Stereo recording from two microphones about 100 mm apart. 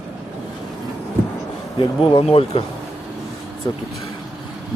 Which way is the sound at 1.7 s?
60° left (ahead or behind).